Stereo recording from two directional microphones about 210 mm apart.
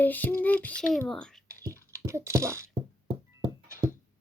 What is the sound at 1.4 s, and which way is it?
Beatboxing, 15° right (ahead or behind).